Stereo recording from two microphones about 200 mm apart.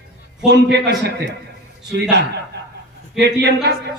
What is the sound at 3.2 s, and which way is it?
Speech, 55° right (ahead or behind).